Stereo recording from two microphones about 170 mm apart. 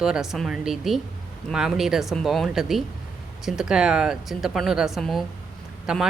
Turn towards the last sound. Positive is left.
turn(degrees=-5)  # may be behind; listen again after turning